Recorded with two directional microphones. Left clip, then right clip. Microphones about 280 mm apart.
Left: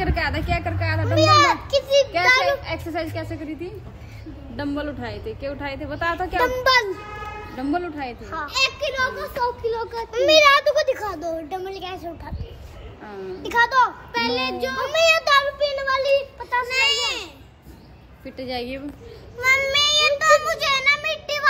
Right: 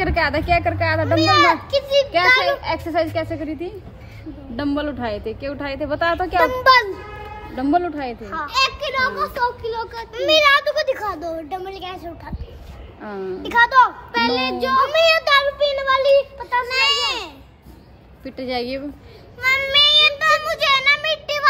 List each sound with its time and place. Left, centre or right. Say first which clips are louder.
0.0 s a woman's voice: right 5 dB; right
1.0 s a child's voice: even; centre
2.6 s a woman's voice: right 7 dB; right
6.4 s a child's voice: right 4 dB; centre
7.5 s a woman's voice: right 7 dB; right
8.2 s a child's voice: right 3 dB; centre
8.5 s a child's voice: right 2 dB; right; by 10.0 s centre
10.1 s a child's voice: even; left
10.8 s a child's voice: right 1 dB; centre
13.4 s a child's voice: right 4 dB; centre
14.1 s a woman's voice: right 4 dB; right
14.9 s a child's voice: left 2 dB; centre
16.6 s a woman's voice: right 2 dB; centre
19.4 s a child's voice: right 3 dB; centre